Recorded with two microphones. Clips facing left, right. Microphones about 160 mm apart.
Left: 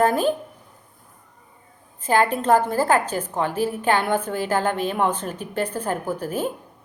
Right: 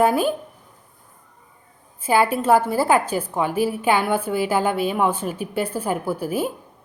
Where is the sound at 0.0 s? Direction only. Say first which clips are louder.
Right 1 dB; 10° right (ahead or behind).